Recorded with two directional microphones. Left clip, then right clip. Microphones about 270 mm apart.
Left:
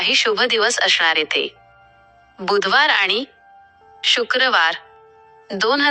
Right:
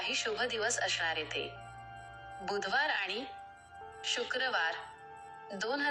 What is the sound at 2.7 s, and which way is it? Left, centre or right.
Speech, left.